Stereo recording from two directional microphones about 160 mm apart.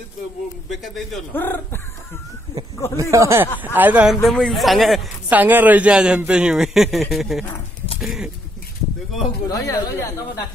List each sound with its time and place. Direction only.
0.7 s a man's voice: centre (ahead or behind)
1.3 s speech: 15° left (ahead or behind)
3.0 s a man's voice: 20° right (ahead or behind); by 5.0 s centre (ahead or behind)
5.3 s a man's voice: 10° right (ahead or behind)
8.0 s bird: centre (ahead or behind)
9.5 s speech: 20° left (ahead or behind)